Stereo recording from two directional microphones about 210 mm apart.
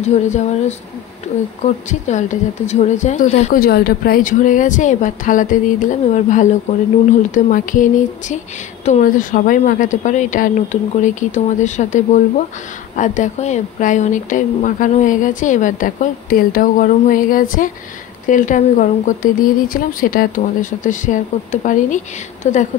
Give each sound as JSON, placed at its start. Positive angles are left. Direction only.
{"t": 0.0, "sound": "a woman's voice", "side_deg": 35}